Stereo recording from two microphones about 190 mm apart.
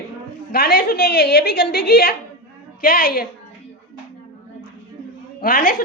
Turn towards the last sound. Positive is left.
turn(degrees=50)  # may be behind; listen again after turning